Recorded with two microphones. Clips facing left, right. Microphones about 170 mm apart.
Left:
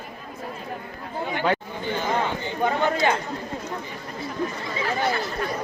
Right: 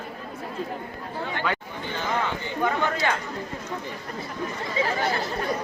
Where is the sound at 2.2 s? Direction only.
25° left (ahead or behind).